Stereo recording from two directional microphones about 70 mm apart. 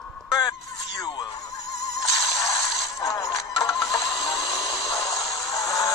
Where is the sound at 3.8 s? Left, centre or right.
Left.